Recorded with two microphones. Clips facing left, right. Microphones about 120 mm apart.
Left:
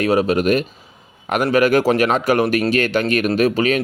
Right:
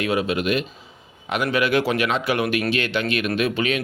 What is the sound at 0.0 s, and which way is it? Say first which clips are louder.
Speech: left 6 dB; 40° left (ahead or behind).